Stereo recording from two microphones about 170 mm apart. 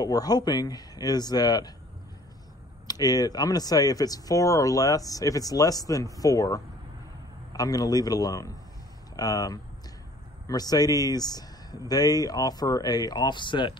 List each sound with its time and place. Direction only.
0.0 s speech: 20° left (ahead or behind)
2.9 s speech: 20° left (ahead or behind)